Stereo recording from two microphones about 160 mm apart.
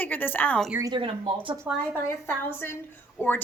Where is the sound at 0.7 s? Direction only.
20° right (ahead or behind).